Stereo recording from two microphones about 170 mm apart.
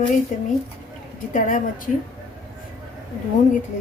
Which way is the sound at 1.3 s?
50° left (ahead or behind).